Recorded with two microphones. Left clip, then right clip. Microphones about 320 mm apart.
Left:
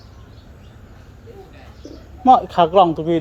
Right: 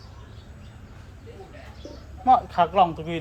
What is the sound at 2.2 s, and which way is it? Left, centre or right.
Speech, left.